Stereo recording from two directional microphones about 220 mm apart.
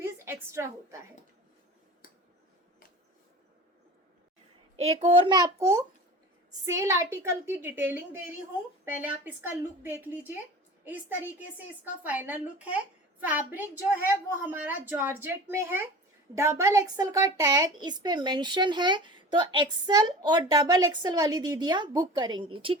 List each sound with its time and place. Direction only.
0.0 s a woman's voice: 10° right (ahead or behind)
4.8 s a woman's voice: 30° right (ahead or behind)